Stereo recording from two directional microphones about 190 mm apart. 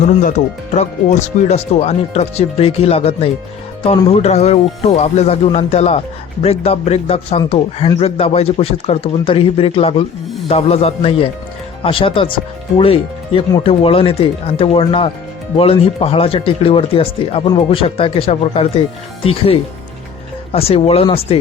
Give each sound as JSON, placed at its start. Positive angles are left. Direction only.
{"t": 0.3, "sound": "a man's voice", "side_deg": 40}